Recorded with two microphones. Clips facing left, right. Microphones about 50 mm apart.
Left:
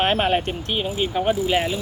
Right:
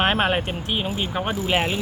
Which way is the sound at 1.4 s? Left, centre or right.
Right.